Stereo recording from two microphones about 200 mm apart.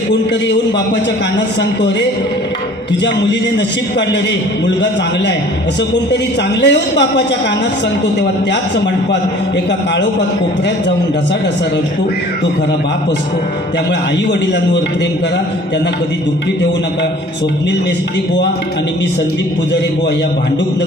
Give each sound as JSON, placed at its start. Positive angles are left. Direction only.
{"t": 4.6, "sound": "a man's voice", "side_deg": 60}
{"t": 6.6, "sound": "a man's voice", "side_deg": 60}